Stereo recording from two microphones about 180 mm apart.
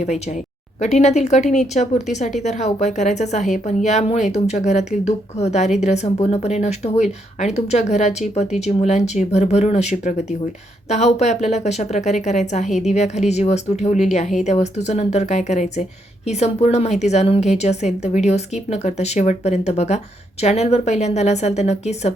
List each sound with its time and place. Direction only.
0.0 s speech: 40° left (ahead or behind)